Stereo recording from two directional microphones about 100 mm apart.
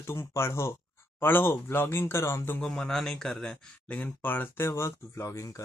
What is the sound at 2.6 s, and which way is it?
Speech, 5° left (ahead or behind).